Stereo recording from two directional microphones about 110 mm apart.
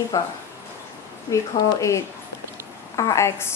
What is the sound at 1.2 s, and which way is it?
A woman's voice, 30° left (ahead or behind).